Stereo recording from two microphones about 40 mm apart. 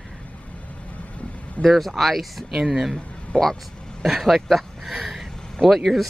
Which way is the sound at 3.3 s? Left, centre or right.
Left.